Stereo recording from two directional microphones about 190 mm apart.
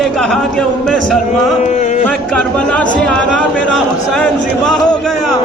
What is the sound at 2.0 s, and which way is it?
Speech, 5° left (ahead or behind).